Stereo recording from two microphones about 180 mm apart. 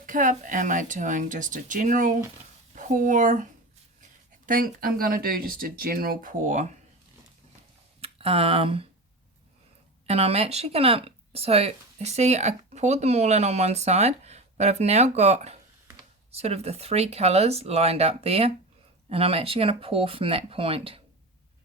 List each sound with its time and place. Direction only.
0.0 s speech: 45° right (ahead or behind)
8.0 s speech: 30° right (ahead or behind)
10.1 s speech: 35° right (ahead or behind)